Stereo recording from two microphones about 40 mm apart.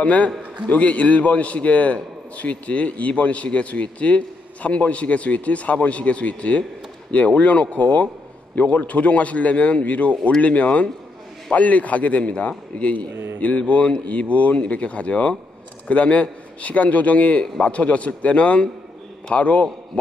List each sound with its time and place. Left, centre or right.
0.0 s a man's voice: left
13.1 s a man's voice: right
13.4 s a man's voice: left